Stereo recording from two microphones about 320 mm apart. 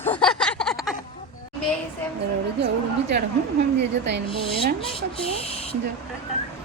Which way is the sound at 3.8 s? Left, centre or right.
Right.